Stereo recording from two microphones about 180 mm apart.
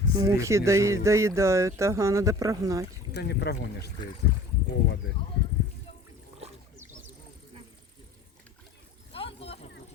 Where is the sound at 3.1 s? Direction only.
70° left (ahead or behind).